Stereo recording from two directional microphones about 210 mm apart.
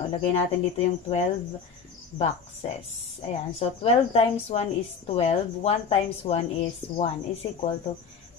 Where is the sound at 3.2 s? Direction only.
30° left (ahead or behind).